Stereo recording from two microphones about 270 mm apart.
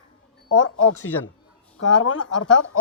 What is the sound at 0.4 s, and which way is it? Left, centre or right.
Speech, left.